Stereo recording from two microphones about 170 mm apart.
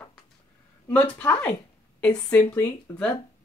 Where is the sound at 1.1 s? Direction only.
10° left (ahead or behind).